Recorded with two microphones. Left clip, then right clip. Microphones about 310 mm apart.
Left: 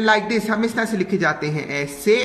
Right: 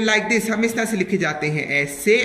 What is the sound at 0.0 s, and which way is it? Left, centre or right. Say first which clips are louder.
Speech: left 1 dB; left.